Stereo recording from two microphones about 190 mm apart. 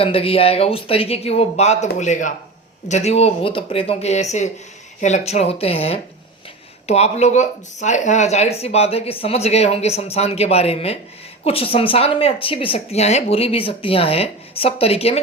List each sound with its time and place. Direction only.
0.0 s speech: 30° left (ahead or behind)